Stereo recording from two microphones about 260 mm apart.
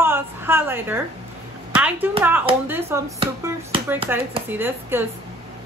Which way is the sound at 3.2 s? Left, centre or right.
Right.